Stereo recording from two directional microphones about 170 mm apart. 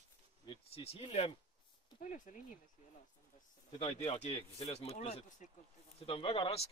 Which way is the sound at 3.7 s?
40° left (ahead or behind).